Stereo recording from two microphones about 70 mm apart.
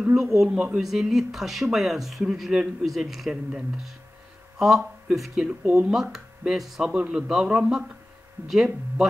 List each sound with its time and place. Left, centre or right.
0.0 s a man's voice: centre
4.6 s speech: centre
5.5 s speech: right
5.9 s a man's voice: centre